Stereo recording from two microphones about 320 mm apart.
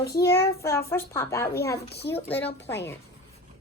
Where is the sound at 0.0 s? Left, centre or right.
Centre.